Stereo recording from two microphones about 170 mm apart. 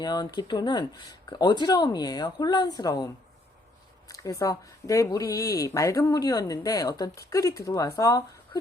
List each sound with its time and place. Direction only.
0.0 s speech: 25° left (ahead or behind)
4.1 s speech: 20° left (ahead or behind)